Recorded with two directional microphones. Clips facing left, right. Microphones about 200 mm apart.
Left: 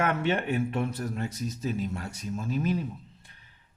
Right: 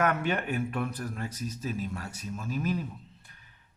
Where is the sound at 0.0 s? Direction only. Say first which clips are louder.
Left 1 dB; 25° left (ahead or behind).